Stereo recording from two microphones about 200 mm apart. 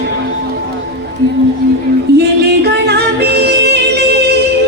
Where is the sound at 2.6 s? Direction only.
55° right (ahead or behind).